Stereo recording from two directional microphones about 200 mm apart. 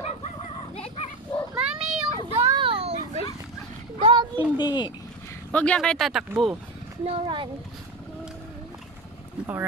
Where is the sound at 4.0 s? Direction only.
30° right (ahead or behind).